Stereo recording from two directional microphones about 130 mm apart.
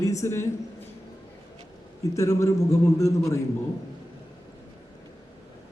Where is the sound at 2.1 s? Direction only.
25° left (ahead or behind).